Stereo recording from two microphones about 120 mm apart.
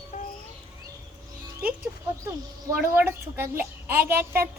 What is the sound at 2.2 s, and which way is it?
A child's voice, 20° right (ahead or behind).